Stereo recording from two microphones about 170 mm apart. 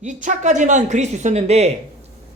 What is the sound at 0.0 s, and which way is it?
Speech, 45° right (ahead or behind).